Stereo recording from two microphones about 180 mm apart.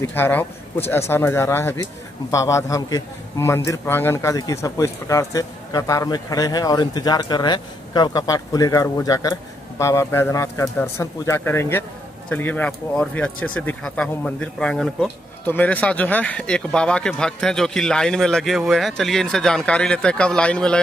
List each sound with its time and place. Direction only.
0.0 s a man's voice: 10° left (ahead or behind)